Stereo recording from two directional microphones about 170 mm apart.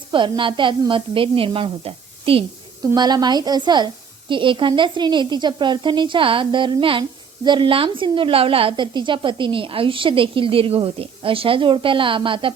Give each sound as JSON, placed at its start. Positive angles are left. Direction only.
{"t": 0.1, "sound": "a woman's voice", "side_deg": -30}